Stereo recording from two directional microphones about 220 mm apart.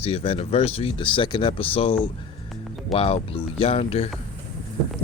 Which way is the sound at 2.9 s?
25° left (ahead or behind).